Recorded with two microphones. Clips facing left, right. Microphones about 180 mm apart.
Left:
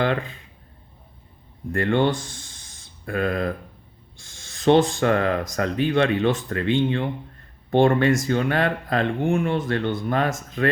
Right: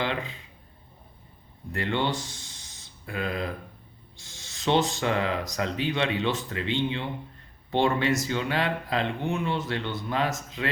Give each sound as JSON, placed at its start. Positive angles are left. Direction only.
{"t": 0.0, "sound": "speech", "side_deg": 50}
{"t": 1.7, "sound": "speech", "side_deg": 50}